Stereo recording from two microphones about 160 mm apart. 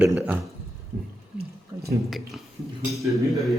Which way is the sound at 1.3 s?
75° right (ahead or behind).